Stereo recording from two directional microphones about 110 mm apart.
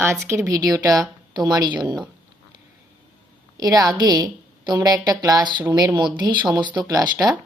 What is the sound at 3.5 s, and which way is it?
A woman's voice, 35° right (ahead or behind).